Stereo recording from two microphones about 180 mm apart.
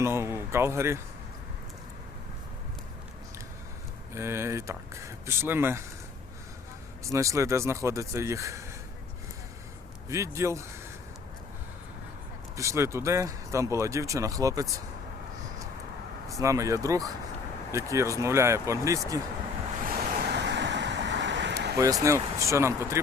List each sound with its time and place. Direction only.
0.0 s speech: 15° right (ahead or behind)
4.1 s speech: 15° right (ahead or behind)
7.0 s speech: 15° right (ahead or behind)
10.1 s speech: 15° right (ahead or behind)
12.5 s speech: 15° right (ahead or behind)
16.4 s speech: 20° right (ahead or behind)
19.8 s waves: 50° right (ahead or behind); by 21.8 s 70° right (ahead or behind)
22.0 s speech: 15° right (ahead or behind)